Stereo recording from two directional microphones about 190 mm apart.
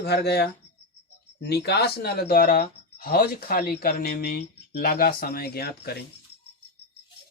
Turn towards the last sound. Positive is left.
turn(degrees=55)  # may be behind; listen again after turning